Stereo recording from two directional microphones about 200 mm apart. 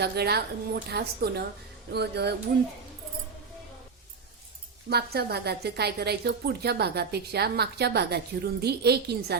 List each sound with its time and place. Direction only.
0.0 s a woman's voice: 55° right (ahead or behind)
1.9 s music: 55° right (ahead or behind)
4.9 s a woman's voice: 55° right (ahead or behind)